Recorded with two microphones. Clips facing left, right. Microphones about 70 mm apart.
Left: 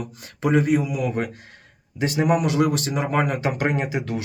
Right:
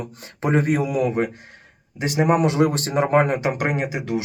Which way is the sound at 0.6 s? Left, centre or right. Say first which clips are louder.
Right 1 dB; right.